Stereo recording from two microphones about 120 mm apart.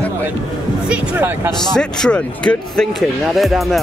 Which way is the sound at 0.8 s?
15° right (ahead or behind).